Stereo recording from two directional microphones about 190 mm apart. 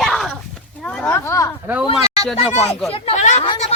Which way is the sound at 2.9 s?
30° left (ahead or behind).